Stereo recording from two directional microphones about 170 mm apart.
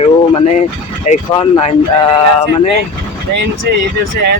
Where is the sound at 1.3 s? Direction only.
30° left (ahead or behind).